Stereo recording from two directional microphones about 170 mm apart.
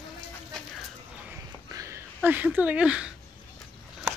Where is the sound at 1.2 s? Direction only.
15° right (ahead or behind).